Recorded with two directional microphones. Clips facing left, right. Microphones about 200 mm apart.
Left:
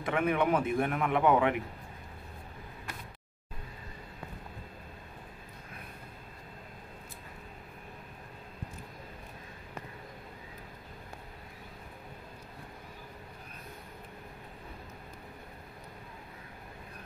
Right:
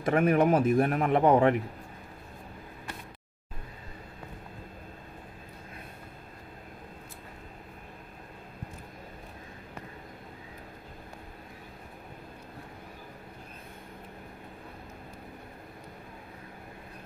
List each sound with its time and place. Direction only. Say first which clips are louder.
0.0 s a man's voice: right 5 dB; 40° right (ahead or behind)